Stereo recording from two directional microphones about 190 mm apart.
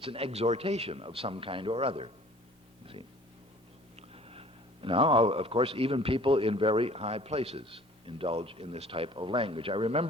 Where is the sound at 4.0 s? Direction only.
30° right (ahead or behind).